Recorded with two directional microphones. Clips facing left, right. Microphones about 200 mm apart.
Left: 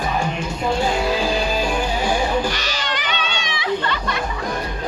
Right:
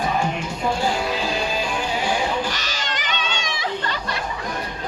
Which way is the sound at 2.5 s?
45° right (ahead or behind).